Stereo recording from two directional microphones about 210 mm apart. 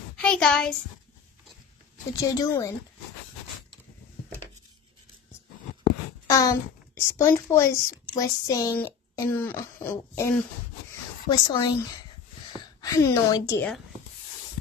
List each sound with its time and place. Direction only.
0.2 s speech: 5° left (ahead or behind)
2.1 s speech: 15° left (ahead or behind)
6.2 s a child's voice: 15° left (ahead or behind)